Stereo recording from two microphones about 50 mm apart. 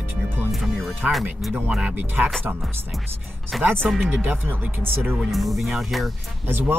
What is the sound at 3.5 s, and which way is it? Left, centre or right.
Speech, centre.